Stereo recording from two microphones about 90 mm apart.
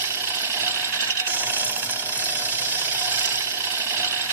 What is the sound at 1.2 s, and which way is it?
Jackhammer, 20° right (ahead or behind).